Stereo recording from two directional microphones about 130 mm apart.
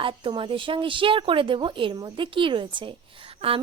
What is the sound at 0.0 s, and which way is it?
A woman's voice, 40° right (ahead or behind).